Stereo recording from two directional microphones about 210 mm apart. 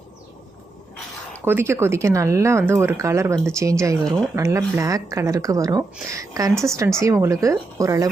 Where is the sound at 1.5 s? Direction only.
10° right (ahead or behind).